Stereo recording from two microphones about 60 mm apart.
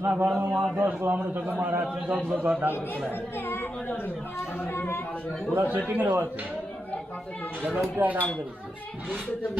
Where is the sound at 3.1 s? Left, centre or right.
Left.